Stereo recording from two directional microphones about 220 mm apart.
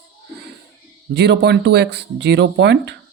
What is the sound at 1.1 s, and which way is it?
Speech, 50° right (ahead or behind).